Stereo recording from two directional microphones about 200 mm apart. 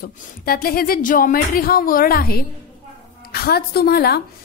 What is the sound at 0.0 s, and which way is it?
A woman's voice, 45° left (ahead or behind).